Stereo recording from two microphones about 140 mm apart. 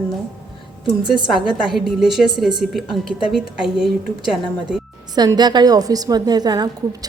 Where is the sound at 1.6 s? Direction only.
Centre (ahead or behind).